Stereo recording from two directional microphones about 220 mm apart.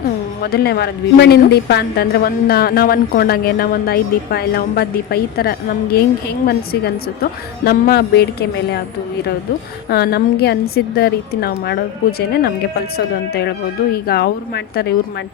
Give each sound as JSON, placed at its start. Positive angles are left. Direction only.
{"t": 0.5, "sound": "a woman's voice", "side_deg": 45}
{"t": 9.9, "sound": "a woman's voice", "side_deg": 45}
{"t": 13.9, "sound": "a woman's voice", "side_deg": 45}